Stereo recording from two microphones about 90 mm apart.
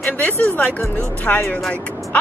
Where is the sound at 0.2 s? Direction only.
15° left (ahead or behind).